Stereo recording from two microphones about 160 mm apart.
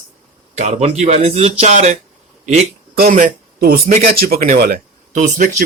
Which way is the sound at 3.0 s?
55° right (ahead or behind).